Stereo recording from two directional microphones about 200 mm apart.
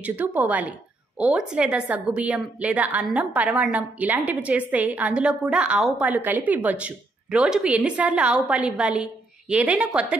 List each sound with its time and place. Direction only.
0.0 s a woman's voice: 10° right (ahead or behind)